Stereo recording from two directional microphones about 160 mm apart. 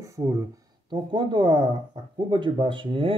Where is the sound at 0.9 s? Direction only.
30° right (ahead or behind).